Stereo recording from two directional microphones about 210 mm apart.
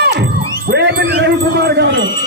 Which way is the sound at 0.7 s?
55° right (ahead or behind).